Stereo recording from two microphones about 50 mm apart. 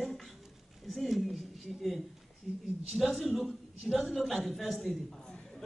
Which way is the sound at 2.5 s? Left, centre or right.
Centre.